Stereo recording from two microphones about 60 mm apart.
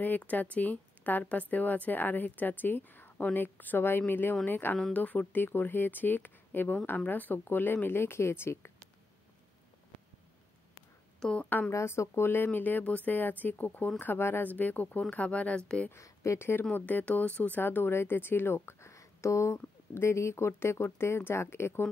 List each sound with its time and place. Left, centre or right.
0.2 s speech: left
11.1 s a woman's voice: centre
11.7 s speech: left
16.0 s speech: left
16.7 s speech: left